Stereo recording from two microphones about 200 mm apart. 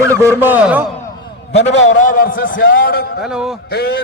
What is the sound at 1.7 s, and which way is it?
Speech, 65° left (ahead or behind).